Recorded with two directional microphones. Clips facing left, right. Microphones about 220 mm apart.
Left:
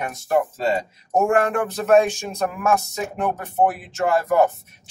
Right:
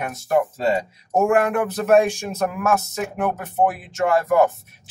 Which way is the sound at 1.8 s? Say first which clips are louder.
Even; 10° right (ahead or behind).